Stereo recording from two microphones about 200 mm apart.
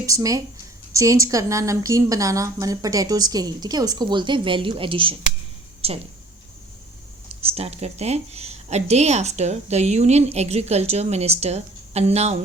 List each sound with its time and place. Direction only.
0.0 s a woman's voice: 15° right (ahead or behind)
7.4 s speech: 30° right (ahead or behind)